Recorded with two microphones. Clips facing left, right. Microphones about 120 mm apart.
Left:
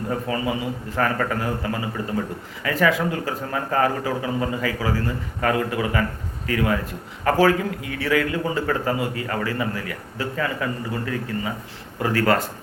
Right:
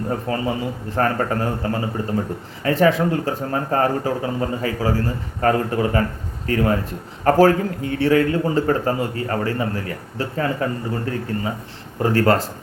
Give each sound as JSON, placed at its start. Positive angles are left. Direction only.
{"t": 0.1, "sound": "speech", "side_deg": -35}